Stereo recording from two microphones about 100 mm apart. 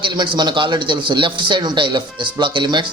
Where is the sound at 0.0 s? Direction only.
50° right (ahead or behind).